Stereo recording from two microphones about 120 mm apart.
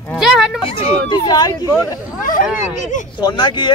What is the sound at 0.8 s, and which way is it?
Speech, 50° left (ahead or behind).